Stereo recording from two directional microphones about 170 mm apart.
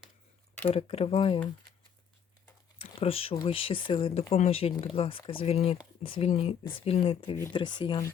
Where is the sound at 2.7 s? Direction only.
35° left (ahead or behind).